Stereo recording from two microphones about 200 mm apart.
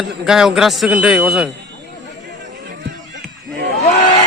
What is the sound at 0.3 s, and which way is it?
A man's voice, centre (ahead or behind).